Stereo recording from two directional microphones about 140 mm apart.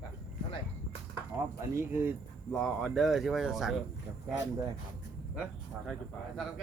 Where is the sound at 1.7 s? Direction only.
15° right (ahead or behind).